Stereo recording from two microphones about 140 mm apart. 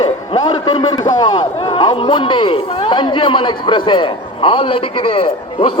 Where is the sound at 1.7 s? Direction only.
40° left (ahead or behind).